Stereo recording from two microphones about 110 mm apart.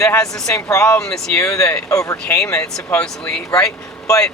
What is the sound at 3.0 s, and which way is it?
Speech, 5° left (ahead or behind).